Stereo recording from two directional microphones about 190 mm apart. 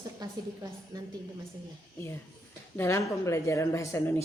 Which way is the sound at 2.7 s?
15° left (ahead or behind).